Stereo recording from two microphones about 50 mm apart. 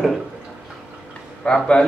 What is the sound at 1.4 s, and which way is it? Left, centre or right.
Speech, centre.